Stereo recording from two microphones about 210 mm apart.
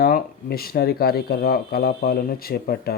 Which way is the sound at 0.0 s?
45° left (ahead or behind).